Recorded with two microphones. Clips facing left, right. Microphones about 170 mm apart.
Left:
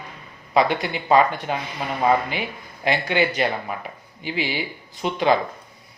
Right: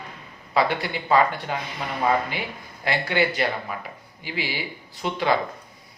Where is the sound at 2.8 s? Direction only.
20° left (ahead or behind).